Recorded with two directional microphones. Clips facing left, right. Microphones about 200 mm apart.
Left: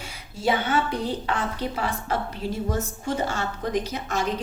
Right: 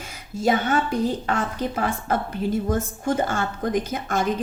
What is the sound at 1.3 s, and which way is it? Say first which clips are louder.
A woman's voice: right 2 dB; 50° right (ahead or behind).